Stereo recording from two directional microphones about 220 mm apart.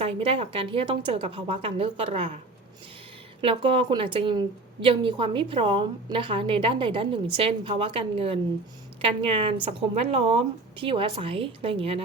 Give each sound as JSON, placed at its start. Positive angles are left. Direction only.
{"t": 0.0, "sound": "a woman's voice", "side_deg": -25}
{"t": 3.4, "sound": "a woman's voice", "side_deg": -25}